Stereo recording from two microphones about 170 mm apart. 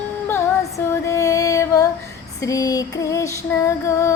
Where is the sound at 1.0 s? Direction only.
20° left (ahead or behind).